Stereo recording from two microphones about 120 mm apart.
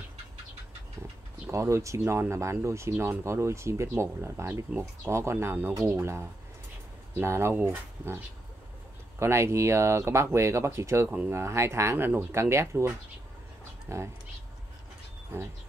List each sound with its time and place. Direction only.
1.5 s speech: 25° right (ahead or behind)
9.2 s speech: 25° right (ahead or behind)
11.1 s speech: 10° right (ahead or behind)
11.3 s speech: 25° right (ahead or behind)
12.1 s speech: 10° right (ahead or behind)
12.4 s speech: 25° right (ahead or behind)